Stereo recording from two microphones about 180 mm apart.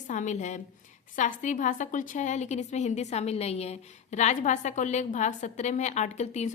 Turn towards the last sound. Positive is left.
turn(degrees=40)  # may be behind; listen again after turning